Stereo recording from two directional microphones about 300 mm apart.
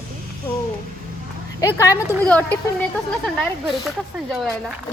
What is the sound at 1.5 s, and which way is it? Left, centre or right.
Speech, centre.